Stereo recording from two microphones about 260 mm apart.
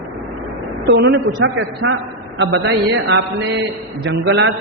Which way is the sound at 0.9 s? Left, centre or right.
Right.